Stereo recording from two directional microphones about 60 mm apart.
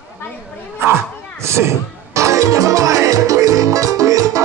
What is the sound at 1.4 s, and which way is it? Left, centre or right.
Speech, right.